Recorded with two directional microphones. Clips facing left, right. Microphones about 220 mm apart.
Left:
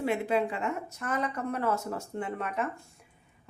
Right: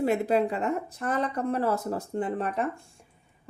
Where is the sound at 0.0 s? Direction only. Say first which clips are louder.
Right 4 dB; 40° right (ahead or behind).